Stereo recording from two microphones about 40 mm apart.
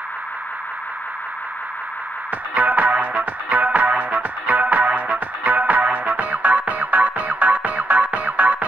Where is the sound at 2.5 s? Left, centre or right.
Right.